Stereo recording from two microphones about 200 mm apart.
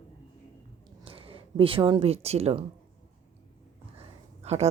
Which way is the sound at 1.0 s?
25° right (ahead or behind).